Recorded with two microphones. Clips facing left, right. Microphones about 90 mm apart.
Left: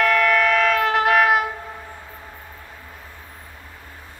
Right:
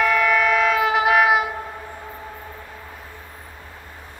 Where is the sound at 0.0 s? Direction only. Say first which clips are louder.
Even; 5° right (ahead or behind).